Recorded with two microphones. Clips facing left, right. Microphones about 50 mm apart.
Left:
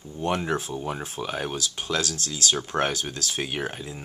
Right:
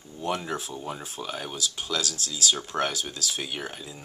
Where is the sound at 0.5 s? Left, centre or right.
Left.